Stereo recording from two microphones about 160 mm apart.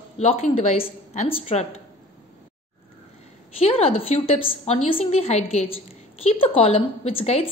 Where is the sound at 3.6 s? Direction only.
40° left (ahead or behind).